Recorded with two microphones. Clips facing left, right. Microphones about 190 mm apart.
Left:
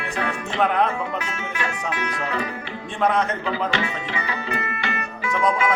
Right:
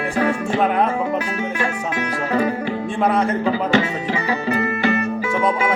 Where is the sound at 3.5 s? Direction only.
40° right (ahead or behind).